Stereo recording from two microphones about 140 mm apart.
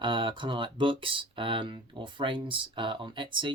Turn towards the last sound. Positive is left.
turn(degrees=-35)  # may be behind; listen again after turning